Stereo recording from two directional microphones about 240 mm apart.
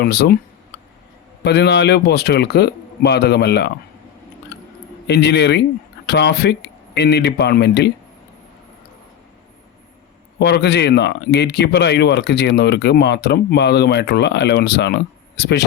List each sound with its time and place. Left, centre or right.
0.0 s speech: left
1.5 s speech: left
5.0 s speech: left
10.3 s speech: left